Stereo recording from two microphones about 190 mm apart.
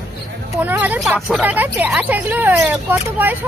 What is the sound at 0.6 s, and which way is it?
Speech, 10° right (ahead or behind).